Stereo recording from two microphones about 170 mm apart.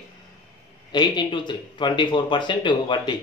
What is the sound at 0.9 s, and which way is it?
Speech, 25° left (ahead or behind).